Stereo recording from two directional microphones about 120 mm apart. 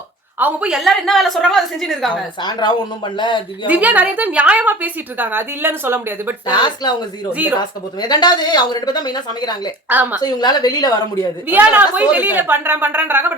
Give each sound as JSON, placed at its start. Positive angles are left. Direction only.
{"t": 0.3, "sound": "a woman's voice", "side_deg": -15}
{"t": 0.8, "sound": "a woman's voice", "side_deg": 0}
{"t": 2.4, "sound": "speech", "side_deg": 35}
{"t": 3.7, "sound": "a woman's voice", "side_deg": -15}
{"t": 6.5, "sound": "speech", "side_deg": 35}
{"t": 9.9, "sound": "a woman's voice", "side_deg": -15}
{"t": 10.2, "sound": "speech", "side_deg": 35}
{"t": 11.4, "sound": "a woman's voice", "side_deg": -15}